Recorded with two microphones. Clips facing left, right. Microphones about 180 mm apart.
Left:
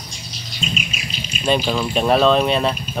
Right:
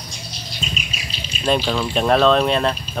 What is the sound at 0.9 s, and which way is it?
Bird, 35° right (ahead or behind).